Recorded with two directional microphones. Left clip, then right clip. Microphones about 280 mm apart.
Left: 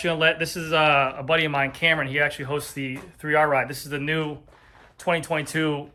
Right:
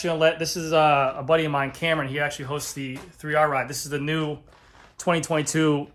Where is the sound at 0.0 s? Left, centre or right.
Centre.